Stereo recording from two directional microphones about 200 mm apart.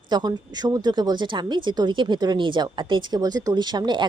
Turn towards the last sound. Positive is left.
turn(degrees=-20)  # may be behind; listen again after turning